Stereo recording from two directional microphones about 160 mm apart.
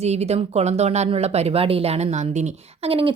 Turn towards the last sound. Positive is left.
turn(degrees=-35)  # may be behind; listen again after turning